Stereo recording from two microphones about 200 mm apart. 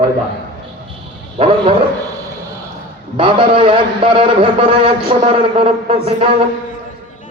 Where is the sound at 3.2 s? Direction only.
25° right (ahead or behind).